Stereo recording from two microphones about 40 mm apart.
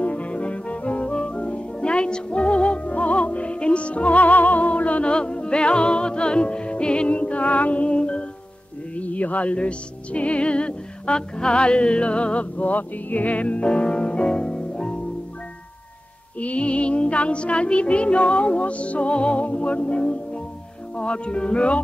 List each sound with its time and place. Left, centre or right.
0.0 s music: left
5.1 s music: left
16.3 s music: left